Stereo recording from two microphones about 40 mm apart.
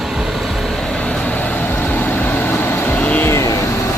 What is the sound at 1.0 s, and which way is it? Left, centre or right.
Vehicle, left.